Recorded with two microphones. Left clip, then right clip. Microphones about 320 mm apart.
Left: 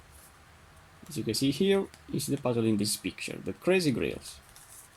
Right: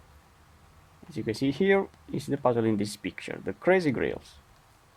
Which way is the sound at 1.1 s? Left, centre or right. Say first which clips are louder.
Even; right.